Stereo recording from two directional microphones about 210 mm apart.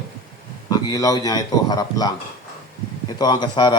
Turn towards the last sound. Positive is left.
turn(degrees=20)  # may be behind; listen again after turning